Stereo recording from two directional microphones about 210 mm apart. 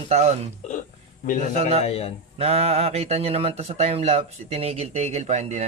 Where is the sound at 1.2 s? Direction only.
40° left (ahead or behind).